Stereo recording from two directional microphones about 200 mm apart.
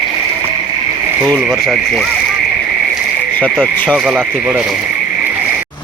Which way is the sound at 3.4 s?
5° left (ahead or behind).